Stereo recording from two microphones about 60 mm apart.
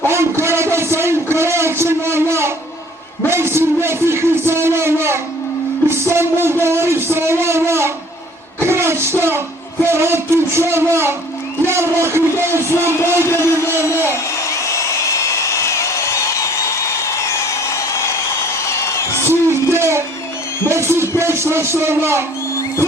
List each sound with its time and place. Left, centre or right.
0.1 s a sound: right
5.9 s speech: right
8.6 s music: right
9.8 s a man's voice: right
13.2 s speech: left
14.1 s a sound: left
18.6 s music: left
19.3 s a sound: right
20.7 s speech: right